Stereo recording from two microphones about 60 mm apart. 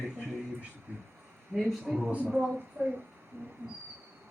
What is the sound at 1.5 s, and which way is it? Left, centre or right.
Speech, centre.